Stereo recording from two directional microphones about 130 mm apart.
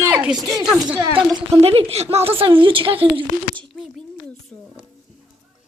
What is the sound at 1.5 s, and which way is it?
A woman's voice, 50° right (ahead or behind).